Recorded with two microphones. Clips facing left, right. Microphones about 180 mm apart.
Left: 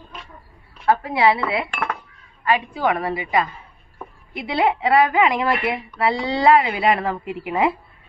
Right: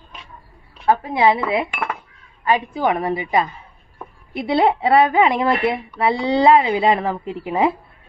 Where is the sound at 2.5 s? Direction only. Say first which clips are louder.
Right 2 dB; 20° right (ahead or behind).